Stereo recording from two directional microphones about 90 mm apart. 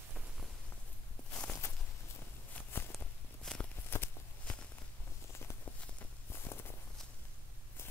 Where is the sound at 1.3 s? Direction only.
15° left (ahead or behind).